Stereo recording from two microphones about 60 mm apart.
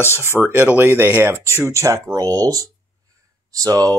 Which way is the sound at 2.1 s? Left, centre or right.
Right.